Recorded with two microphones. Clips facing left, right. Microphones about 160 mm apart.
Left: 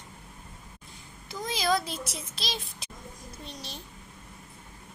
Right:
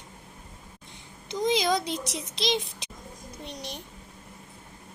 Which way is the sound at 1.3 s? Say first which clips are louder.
Right 4 dB; 20° right (ahead or behind).